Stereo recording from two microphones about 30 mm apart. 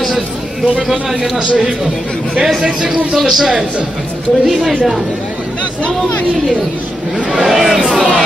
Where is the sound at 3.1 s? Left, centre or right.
Centre.